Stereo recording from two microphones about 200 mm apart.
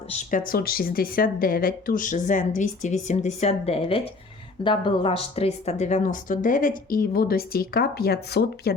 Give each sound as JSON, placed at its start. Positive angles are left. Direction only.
{"t": 0.1, "sound": "speech", "side_deg": 40}